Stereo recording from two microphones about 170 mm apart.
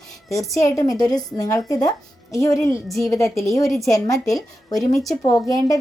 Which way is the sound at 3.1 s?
20° left (ahead or behind).